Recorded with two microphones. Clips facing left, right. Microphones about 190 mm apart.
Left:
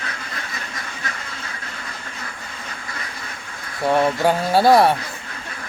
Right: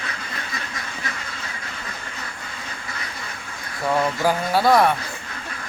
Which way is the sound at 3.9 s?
25° left (ahead or behind).